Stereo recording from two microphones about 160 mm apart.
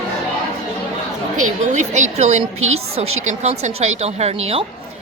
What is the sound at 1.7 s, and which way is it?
A woman's voice, 45° right (ahead or behind).